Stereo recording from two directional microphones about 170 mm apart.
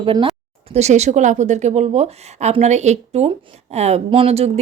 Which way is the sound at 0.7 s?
40° right (ahead or behind).